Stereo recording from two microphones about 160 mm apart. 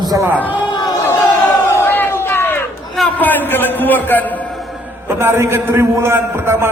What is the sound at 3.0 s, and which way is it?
A man's voice, 10° left (ahead or behind).